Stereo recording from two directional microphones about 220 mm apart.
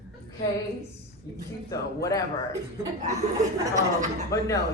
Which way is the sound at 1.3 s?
15° left (ahead or behind).